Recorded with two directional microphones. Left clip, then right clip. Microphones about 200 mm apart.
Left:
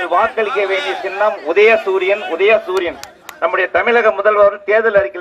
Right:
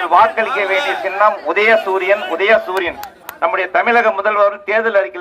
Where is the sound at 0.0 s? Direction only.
35° right (ahead or behind).